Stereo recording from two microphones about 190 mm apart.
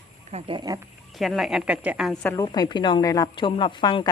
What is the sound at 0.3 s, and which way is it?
Speech, 30° right (ahead or behind).